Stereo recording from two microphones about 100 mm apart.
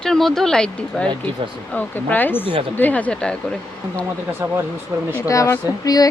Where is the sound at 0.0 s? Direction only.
5° left (ahead or behind).